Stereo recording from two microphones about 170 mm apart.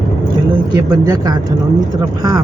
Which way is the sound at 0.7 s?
25° right (ahead or behind).